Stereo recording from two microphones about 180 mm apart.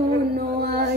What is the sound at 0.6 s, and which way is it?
Music, 60° right (ahead or behind).